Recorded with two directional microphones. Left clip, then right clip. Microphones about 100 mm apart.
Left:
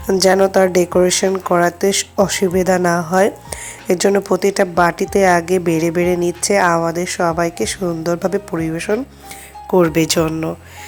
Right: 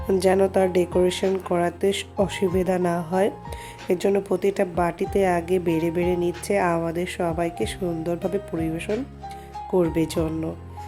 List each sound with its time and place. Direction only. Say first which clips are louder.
0.1 s a woman's voice: left 7 dB; 10° left (ahead or behind)
0.4 s a woman's voice: left 7 dB; 30° left (ahead or behind)